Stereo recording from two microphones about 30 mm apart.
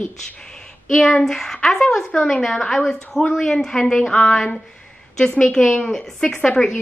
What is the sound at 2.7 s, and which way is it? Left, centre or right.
Speech, centre.